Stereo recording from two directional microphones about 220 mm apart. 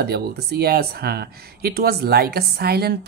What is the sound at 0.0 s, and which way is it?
Speech, 45° right (ahead or behind).